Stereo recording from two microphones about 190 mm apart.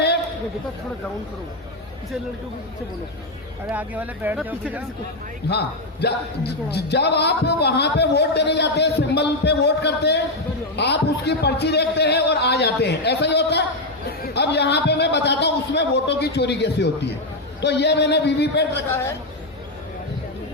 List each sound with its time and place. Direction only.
3.7 s speech: 10° right (ahead or behind)
5.5 s a man's voice: 60° left (ahead or behind)
18.9 s a woman's voice: 15° left (ahead or behind)